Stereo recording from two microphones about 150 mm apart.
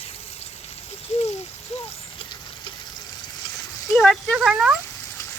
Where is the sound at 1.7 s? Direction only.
45° left (ahead or behind).